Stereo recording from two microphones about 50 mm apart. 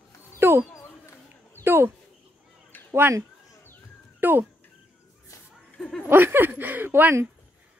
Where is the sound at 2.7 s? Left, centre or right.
Left.